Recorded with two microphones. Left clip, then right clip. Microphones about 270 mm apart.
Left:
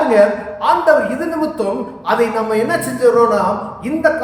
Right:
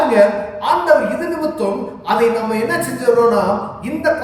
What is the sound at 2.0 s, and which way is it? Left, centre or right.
Speech, centre.